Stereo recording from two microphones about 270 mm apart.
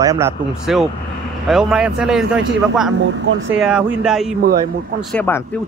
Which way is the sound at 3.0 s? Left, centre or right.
Right.